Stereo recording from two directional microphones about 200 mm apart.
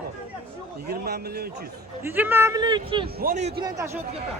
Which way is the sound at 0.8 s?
50° right (ahead or behind).